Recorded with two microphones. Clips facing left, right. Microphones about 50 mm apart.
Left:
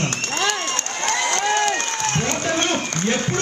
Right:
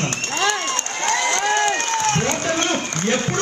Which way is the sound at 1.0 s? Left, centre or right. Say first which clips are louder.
Right 1 dB; right.